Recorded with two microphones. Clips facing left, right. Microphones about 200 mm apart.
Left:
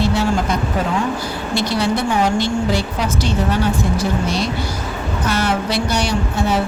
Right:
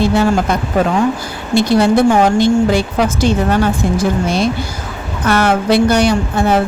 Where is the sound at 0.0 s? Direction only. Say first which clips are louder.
Right 5 dB; 50° right (ahead or behind).